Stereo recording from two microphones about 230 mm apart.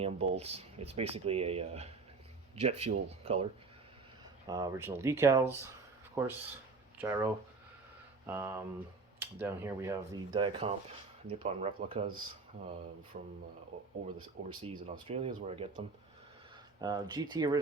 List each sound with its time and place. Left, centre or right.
0.0 s speech: right
4.4 s speech: centre
8.3 s speech: centre
13.1 s speech: right
14.2 s speech: right
16.8 s speech: centre